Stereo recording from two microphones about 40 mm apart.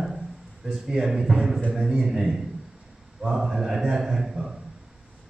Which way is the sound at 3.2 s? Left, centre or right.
Centre.